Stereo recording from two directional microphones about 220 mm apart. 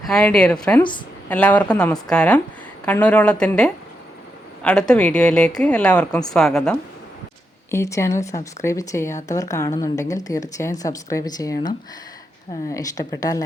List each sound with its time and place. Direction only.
0.0 s a woman's voice: 5° left (ahead or behind)
7.7 s speech: 10° left (ahead or behind)